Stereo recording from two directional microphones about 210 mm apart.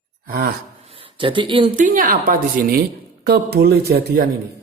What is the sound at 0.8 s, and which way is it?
Speech, 25° right (ahead or behind).